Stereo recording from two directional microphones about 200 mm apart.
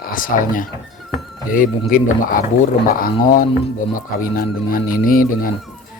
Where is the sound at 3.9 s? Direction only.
45° left (ahead or behind).